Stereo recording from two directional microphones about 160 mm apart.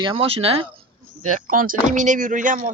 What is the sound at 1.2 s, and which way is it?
Speech, 55° right (ahead or behind).